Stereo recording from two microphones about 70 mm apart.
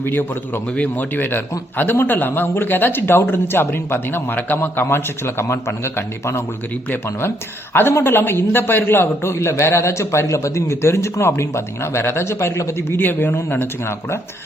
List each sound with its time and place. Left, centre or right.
0.0 s speech: left